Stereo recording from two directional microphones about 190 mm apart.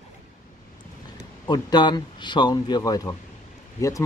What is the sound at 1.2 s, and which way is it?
Speech, 20° left (ahead or behind).